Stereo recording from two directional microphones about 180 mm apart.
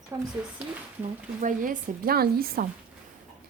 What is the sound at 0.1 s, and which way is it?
Speech, 15° right (ahead or behind).